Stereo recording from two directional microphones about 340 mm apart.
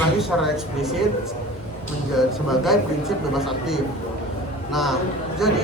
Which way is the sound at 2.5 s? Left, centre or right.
Centre.